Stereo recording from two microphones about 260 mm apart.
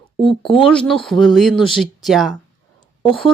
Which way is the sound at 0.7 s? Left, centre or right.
Centre.